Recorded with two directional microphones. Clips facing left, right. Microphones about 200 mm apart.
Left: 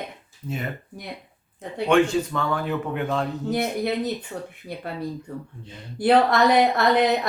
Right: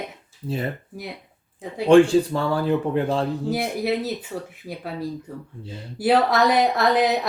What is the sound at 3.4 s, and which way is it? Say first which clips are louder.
A woman's voice: right 1 dB; centre (ahead or behind).